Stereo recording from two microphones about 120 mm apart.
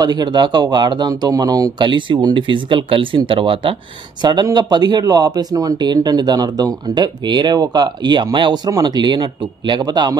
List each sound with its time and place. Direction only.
0.0 s speech: 35° right (ahead or behind)
4.2 s speech: 35° right (ahead or behind)